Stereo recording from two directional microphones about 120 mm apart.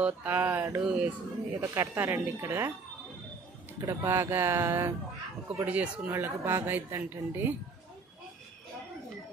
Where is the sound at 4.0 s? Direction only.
20° right (ahead or behind).